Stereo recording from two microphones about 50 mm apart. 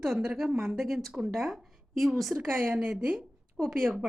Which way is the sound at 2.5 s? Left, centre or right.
Right.